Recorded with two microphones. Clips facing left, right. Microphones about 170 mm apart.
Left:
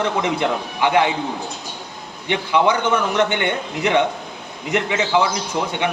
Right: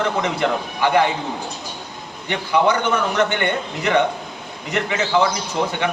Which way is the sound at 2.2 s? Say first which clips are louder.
Even; 15° left (ahead or behind).